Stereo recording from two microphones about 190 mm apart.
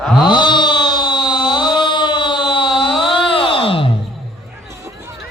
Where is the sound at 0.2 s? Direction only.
25° left (ahead or behind).